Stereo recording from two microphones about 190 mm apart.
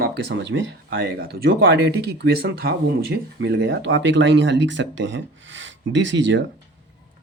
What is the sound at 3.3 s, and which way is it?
Speech, 65° right (ahead or behind).